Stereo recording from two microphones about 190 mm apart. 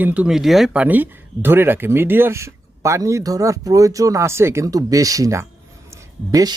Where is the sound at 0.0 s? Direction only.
5° right (ahead or behind).